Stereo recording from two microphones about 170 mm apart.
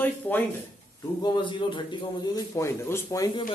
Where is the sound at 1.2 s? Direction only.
25° left (ahead or behind).